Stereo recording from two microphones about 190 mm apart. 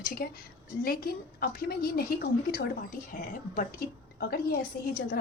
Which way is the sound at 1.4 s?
50° left (ahead or behind).